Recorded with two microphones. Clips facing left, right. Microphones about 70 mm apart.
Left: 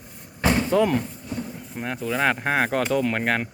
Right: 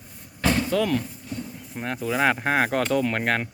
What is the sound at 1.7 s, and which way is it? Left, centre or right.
Speech, centre.